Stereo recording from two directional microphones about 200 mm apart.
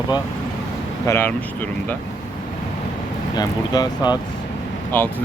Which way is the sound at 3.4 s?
20° left (ahead or behind).